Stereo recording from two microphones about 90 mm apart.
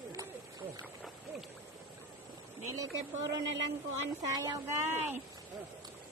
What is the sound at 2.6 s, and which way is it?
Speech, 40° right (ahead or behind).